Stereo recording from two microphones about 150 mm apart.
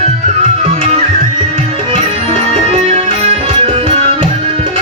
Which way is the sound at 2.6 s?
45° right (ahead or behind).